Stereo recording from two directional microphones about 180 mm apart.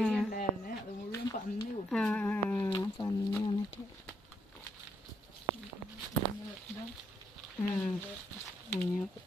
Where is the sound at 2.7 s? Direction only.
25° left (ahead or behind).